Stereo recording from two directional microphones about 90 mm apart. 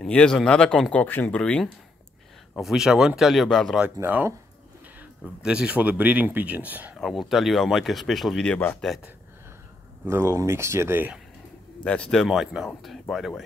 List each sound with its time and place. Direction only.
0.0 s speech: 10° left (ahead or behind)
1.0 s speech: 20° left (ahead or behind)
2.5 s speech: 5° right (ahead or behind)
4.0 s speech: 45° right (ahead or behind)
5.4 s speech: 10° right (ahead or behind)
7.0 s speech: centre (ahead or behind)
10.0 s speech: 30° right (ahead or behind)
11.8 s speech: 10° left (ahead or behind)
12.3 s speech: centre (ahead or behind)